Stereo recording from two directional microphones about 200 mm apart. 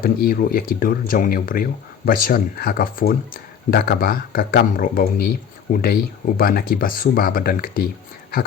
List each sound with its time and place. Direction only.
0.0 s speech: 50° left (ahead or behind)